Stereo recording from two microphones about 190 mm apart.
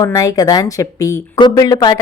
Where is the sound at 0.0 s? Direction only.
15° left (ahead or behind).